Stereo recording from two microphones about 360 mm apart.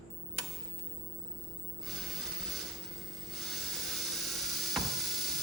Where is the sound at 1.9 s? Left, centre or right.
Centre.